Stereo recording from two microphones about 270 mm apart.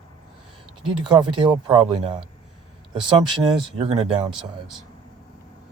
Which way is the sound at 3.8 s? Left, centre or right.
Right.